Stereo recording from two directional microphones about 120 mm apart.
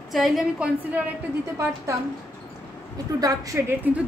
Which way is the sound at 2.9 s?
30° right (ahead or behind).